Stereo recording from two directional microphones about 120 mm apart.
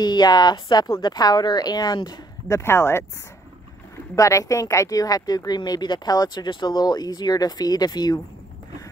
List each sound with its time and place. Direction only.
0.0 s speech: 35° left (ahead or behind)
4.1 s speech: 25° left (ahead or behind)